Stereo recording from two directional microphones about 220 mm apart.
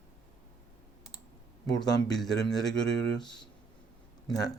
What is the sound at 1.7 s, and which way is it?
Speech, centre (ahead or behind).